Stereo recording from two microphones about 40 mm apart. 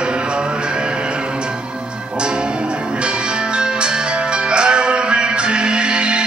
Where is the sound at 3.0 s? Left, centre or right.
Right.